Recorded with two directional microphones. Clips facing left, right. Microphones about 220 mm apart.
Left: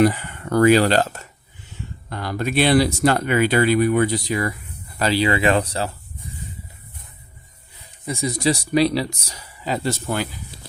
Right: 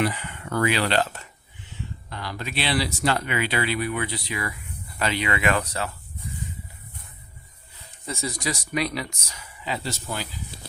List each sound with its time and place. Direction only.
0.0 s speech: 45° left (ahead or behind)
8.0 s speech: 15° left (ahead or behind)
8.4 s speech: 30° left (ahead or behind); by 10.2 s 55° left (ahead or behind)